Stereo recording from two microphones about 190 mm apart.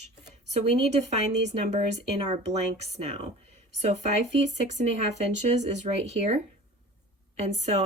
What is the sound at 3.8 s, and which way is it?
Speech, 35° right (ahead or behind).